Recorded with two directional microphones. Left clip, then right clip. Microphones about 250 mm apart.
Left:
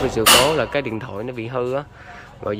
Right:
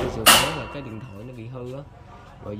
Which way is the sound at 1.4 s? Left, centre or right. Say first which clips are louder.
Left 14 dB; centre.